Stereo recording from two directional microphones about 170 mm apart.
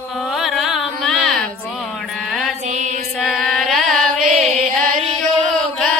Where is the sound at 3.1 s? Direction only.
Centre (ahead or behind).